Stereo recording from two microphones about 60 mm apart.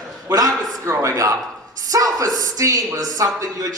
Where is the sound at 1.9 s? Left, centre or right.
Right.